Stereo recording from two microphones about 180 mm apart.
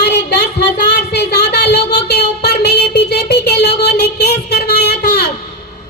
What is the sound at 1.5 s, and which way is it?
Speech, 65° left (ahead or behind).